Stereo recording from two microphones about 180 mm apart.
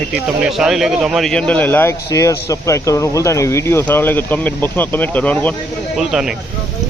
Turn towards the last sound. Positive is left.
turn(degrees=-5)  # may be behind; listen again after turning